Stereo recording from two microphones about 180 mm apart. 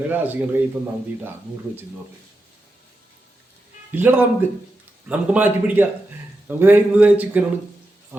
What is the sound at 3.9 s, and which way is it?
A man's voice, 10° right (ahead or behind).